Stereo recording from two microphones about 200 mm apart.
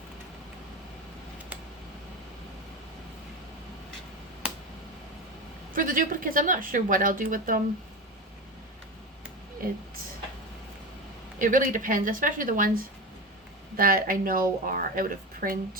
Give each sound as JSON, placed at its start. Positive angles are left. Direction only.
{"t": 5.7, "sound": "a woman's voice", "side_deg": -40}
{"t": 11.3, "sound": "a woman's voice", "side_deg": -40}